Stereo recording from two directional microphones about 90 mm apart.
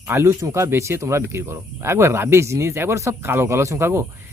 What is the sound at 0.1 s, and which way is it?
Speech, 30° right (ahead or behind).